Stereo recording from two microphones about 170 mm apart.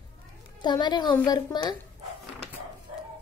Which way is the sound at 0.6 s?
25° left (ahead or behind).